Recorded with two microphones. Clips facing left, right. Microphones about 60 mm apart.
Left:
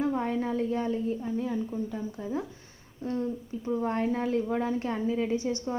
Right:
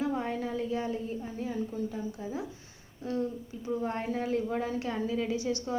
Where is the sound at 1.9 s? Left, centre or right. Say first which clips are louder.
Left 3 dB; left.